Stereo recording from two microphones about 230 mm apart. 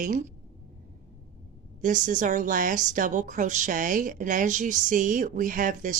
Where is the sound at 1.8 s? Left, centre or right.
Right.